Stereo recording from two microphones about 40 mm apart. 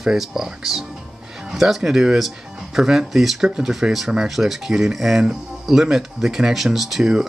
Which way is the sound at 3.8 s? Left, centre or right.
Right.